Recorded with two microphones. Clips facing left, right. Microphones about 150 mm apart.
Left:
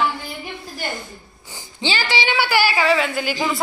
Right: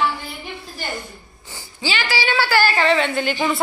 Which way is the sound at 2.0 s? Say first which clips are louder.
Right 1 dB; 20° left (ahead or behind).